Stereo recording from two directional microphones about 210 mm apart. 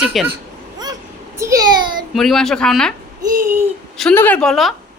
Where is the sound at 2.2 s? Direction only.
Centre (ahead or behind).